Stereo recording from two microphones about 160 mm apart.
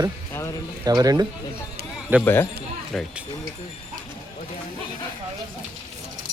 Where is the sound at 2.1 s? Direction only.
10° right (ahead or behind).